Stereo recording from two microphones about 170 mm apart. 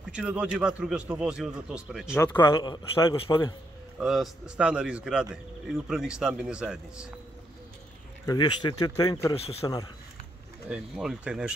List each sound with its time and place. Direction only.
0.1 s speech: 5° right (ahead or behind)
2.1 s a man's voice: 20° left (ahead or behind)
4.0 s speech: centre (ahead or behind)
8.3 s a man's voice: 25° left (ahead or behind)
10.7 s speech: 5° right (ahead or behind)